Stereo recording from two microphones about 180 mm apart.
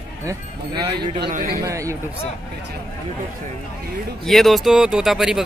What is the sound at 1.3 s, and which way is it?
Speech, 50° right (ahead or behind).